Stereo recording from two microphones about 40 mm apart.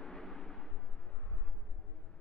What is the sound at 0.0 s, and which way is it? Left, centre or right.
Artillery fire, centre.